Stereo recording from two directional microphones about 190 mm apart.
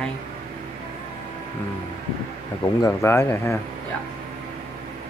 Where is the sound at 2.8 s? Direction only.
15° left (ahead or behind).